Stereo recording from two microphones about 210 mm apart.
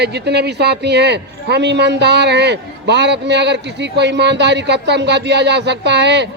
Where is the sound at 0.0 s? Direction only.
50° right (ahead or behind).